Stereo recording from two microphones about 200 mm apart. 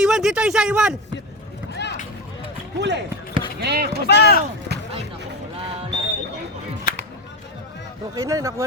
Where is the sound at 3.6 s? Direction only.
55° right (ahead or behind).